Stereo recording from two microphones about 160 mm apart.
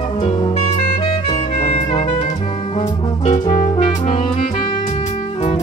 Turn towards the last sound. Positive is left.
turn(degrees=35)  # may be behind; listen again after turning